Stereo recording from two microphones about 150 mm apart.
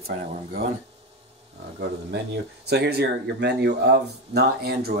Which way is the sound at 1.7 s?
90° right.